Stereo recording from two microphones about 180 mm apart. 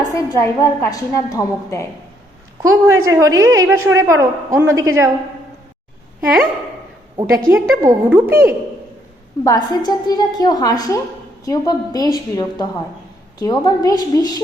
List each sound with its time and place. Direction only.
0.1 s a woman's voice: 15° left (ahead or behind)
2.6 s a woman's voice: 15° right (ahead or behind)
7.5 s a woman's voice: 20° right (ahead or behind)
9.4 s a woman's voice: 20° left (ahead or behind)